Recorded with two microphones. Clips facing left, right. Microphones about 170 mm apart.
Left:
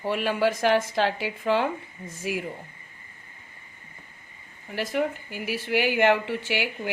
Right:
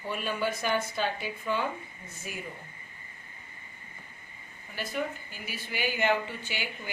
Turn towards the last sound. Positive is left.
turn(degrees=80)